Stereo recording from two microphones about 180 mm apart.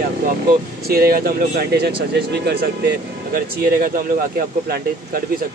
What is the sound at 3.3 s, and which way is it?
Speech, 50° right (ahead or behind).